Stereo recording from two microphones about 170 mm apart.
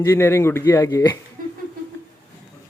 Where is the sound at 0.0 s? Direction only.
15° left (ahead or behind).